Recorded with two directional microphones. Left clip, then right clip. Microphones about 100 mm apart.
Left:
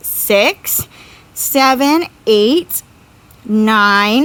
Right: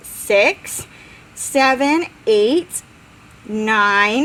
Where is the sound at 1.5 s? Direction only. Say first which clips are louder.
Left 3 dB; 60° left (ahead or behind).